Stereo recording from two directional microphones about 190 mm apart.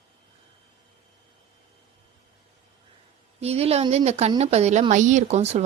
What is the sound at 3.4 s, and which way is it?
Speech, 35° right (ahead or behind).